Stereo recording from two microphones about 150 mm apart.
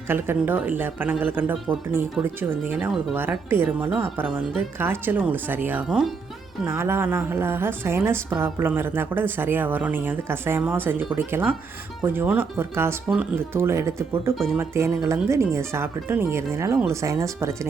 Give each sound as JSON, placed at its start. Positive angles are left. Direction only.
{"t": 0.1, "sound": "a woman's voice", "side_deg": -15}
{"t": 6.7, "sound": "a woman's voice", "side_deg": -15}
{"t": 14.3, "sound": "speech", "side_deg": 0}
{"t": 14.6, "sound": "speech", "side_deg": -15}